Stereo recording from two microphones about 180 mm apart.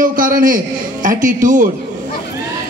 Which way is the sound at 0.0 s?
50° right (ahead or behind).